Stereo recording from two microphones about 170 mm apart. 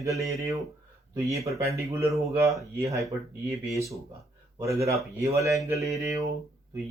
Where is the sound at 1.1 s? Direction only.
20° right (ahead or behind).